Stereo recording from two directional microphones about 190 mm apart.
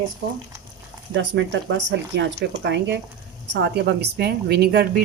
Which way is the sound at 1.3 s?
70° right (ahead or behind).